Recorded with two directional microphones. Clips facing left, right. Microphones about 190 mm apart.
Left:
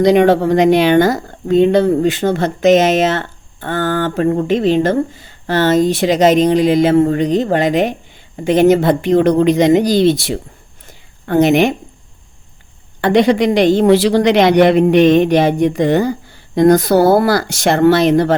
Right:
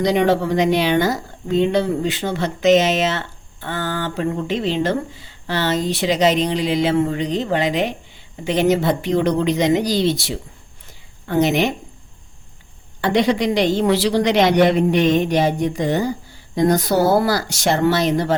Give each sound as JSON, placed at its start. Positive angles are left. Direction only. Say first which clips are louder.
{"t": 0.0, "sound": "speech", "louder": "left 7 dB", "side_deg": 55}
{"t": 13.0, "sound": "speech", "louder": "left 6 dB", "side_deg": 60}